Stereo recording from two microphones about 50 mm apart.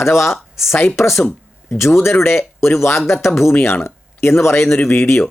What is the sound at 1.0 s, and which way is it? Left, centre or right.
Speech, left.